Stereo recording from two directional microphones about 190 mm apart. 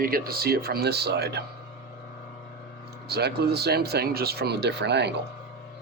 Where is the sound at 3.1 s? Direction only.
60° right (ahead or behind).